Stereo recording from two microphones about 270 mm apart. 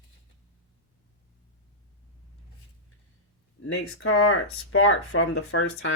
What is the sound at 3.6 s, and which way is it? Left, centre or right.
Speech, left.